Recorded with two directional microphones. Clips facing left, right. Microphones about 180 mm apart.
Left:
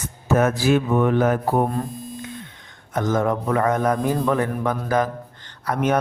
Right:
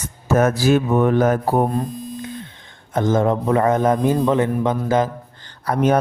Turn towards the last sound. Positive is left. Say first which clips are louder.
# right 4 dB
turn(degrees=-35)  # may be behind; listen again after turning